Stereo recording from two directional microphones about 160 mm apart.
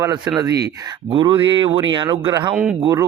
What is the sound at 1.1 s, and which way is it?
Speech, 35° right (ahead or behind).